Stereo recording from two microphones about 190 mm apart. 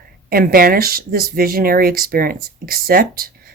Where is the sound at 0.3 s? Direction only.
50° right (ahead or behind).